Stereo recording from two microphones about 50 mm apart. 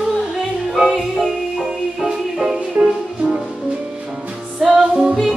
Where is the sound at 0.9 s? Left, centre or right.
Centre.